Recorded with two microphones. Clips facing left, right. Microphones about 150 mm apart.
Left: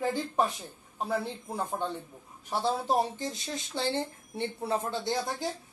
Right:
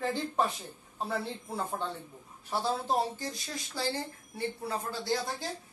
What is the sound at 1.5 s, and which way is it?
Speech, 15° left (ahead or behind).